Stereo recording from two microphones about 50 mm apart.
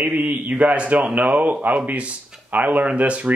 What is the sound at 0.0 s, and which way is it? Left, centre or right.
A man's voice, right.